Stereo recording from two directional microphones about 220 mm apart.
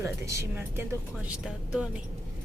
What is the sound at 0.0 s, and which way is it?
Speech, 10° right (ahead or behind).